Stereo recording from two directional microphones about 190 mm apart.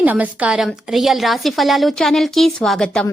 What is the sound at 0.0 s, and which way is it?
A woman's voice, 10° right (ahead or behind).